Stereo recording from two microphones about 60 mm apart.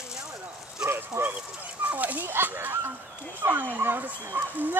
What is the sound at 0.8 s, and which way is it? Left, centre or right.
Dog, right.